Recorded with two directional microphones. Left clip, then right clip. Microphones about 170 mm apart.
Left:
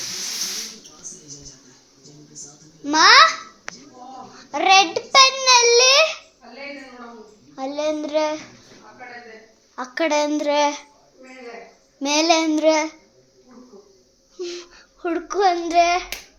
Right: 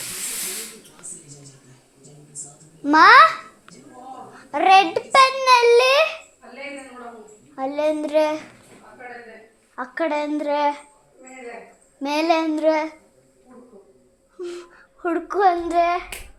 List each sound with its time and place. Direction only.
2.8 s a child's voice: 35° right (ahead or behind)
4.5 s child singing: 15° right (ahead or behind)
7.5 s child singing: 15° right (ahead or behind)
9.9 s child singing: 10° left (ahead or behind)
11.9 s child singing: 5° left (ahead or behind)
14.3 s babbling: centre (ahead or behind)
15.7 s child singing: 5° left (ahead or behind)